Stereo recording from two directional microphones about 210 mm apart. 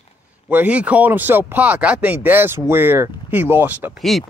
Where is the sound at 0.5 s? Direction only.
5° right (ahead or behind).